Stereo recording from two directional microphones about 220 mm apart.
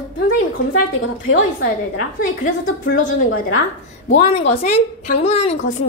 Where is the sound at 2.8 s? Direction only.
40° left (ahead or behind).